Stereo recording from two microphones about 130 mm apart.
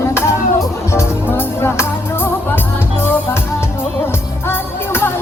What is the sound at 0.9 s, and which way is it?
Music, 20° left (ahead or behind).